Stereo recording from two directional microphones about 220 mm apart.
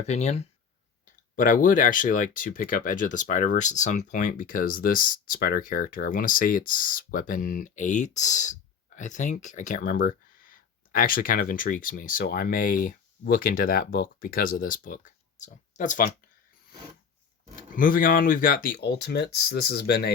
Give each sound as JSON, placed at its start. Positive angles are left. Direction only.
{"t": 0.1, "sound": "speech", "side_deg": 30}
{"t": 17.7, "sound": "speech", "side_deg": 40}